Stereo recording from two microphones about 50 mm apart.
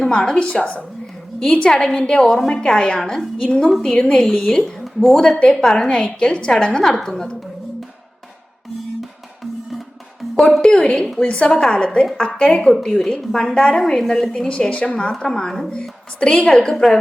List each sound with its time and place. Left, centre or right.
0.0 s a woman's voice: centre
3.0 s a woman's voice: centre
3.4 s a woman's voice: centre
4.6 s a woman's voice: centre
9.0 s music: centre
10.6 s a woman's voice: centre
12.7 s a woman's voice: centre; by 15.1 s left
15.2 s a woman's voice: centre